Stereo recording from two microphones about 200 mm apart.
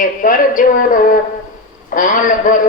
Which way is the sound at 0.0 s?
40° left (ahead or behind).